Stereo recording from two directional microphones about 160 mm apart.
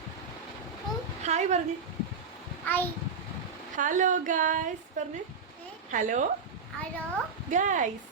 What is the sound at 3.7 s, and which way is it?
A woman's voice, 55° right (ahead or behind).